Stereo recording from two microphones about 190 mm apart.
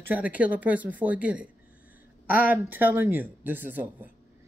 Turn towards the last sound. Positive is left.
turn(degrees=-10)  # may be behind; listen again after turning